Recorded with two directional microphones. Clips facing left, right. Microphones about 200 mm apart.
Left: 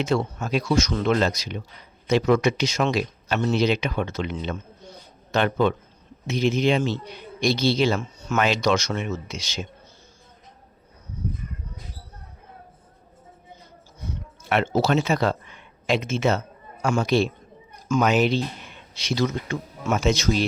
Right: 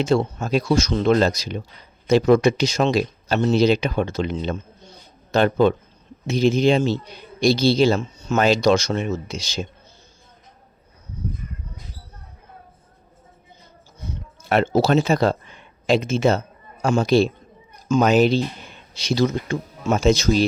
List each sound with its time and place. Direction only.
0.0 s a man's voice: 30° right (ahead or behind)
14.5 s a man's voice: 35° right (ahead or behind)
18.1 s speech: 35° right (ahead or behind)